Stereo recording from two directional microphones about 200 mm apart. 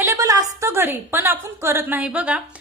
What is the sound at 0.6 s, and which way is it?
A woman's voice, 10° right (ahead or behind).